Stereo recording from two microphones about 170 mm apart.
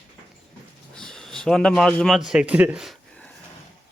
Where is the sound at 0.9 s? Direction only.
5° left (ahead or behind).